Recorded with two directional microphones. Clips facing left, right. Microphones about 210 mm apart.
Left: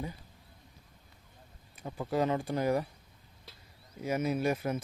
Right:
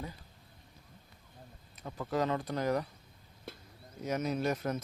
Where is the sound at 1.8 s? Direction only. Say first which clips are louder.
Left 2 dB; 15° left (ahead or behind).